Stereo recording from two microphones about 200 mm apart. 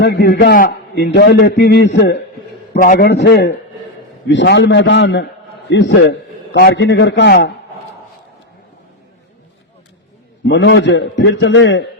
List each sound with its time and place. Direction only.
0.0 s a man's voice: 55° left (ahead or behind)
2.8 s a man's voice: 45° left (ahead or behind)
10.4 s a man's voice: 65° left (ahead or behind)